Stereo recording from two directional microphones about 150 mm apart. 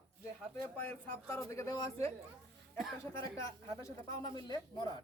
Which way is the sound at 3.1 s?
20° left (ahead or behind).